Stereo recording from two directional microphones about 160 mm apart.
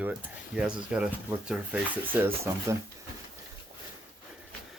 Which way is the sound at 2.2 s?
15° right (ahead or behind).